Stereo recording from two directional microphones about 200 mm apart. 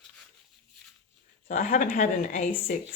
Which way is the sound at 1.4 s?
40° left (ahead or behind).